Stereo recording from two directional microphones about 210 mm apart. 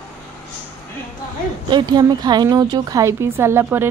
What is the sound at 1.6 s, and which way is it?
Speech, 20° right (ahead or behind).